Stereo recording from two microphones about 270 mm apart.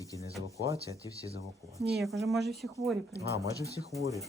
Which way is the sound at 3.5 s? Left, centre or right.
Centre.